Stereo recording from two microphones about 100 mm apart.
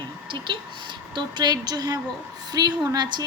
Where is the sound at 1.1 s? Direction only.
45° right (ahead or behind).